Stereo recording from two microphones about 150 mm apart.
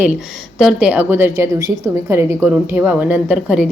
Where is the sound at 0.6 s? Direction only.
5° right (ahead or behind).